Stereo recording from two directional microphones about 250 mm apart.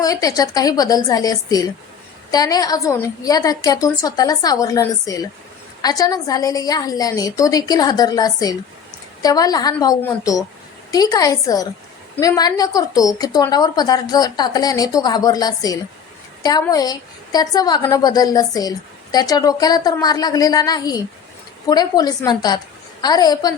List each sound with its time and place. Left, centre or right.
0.0 s a woman's voice: centre